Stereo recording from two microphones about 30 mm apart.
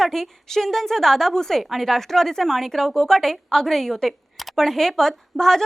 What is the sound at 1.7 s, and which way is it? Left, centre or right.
Speech, centre.